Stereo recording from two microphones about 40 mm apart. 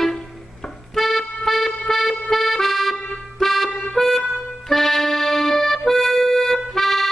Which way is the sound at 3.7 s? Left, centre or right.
Centre.